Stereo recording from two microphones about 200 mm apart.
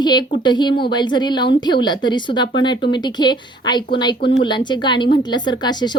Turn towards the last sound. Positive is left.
turn(degrees=20)  # may be behind; listen again after turning